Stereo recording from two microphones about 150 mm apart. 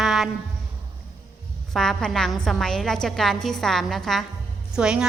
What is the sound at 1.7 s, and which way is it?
A woman's voice, 5° left (ahead or behind).